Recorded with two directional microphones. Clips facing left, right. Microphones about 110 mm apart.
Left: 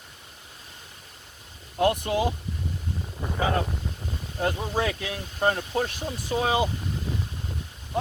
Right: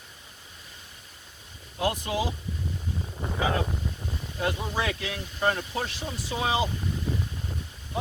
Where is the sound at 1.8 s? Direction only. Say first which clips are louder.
Left 5 dB; 55° left (ahead or behind).